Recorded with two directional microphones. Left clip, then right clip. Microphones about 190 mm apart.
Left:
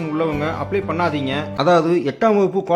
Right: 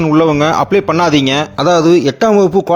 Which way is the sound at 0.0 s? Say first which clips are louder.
Right 11 dB; 40° right (ahead or behind).